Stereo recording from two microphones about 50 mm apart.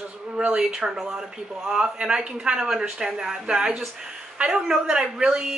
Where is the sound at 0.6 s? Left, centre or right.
Centre.